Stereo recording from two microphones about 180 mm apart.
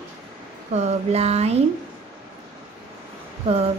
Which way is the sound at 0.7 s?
35° right (ahead or behind).